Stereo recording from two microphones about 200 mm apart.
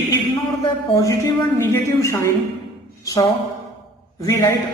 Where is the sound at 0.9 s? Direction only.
15° left (ahead or behind).